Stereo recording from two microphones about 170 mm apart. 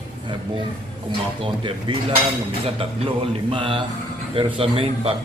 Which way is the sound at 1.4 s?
30° right (ahead or behind).